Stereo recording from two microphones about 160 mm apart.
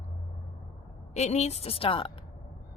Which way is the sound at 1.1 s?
45° left (ahead or behind).